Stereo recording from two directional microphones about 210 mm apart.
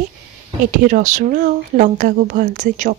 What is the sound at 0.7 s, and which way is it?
Speech, 40° right (ahead or behind).